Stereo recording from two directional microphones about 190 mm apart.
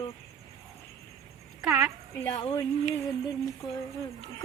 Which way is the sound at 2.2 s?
25° left (ahead or behind).